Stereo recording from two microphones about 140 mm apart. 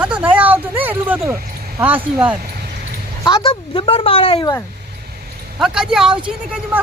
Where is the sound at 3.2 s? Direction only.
35° left (ahead or behind).